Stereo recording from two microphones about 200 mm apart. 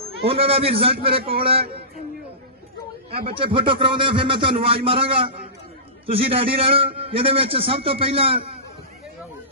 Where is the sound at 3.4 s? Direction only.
25° right (ahead or behind).